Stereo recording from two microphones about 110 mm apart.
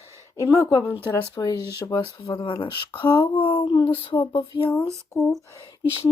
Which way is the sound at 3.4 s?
55° left (ahead or behind).